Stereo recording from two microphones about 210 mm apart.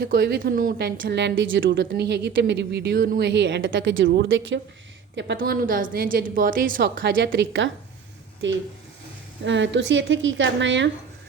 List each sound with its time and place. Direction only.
0.0 s a woman's voice: 45° right (ahead or behind)
1.2 s speech: 60° right (ahead or behind)
5.4 s a woman's voice: 40° right (ahead or behind); by 10.8 s 60° right (ahead or behind)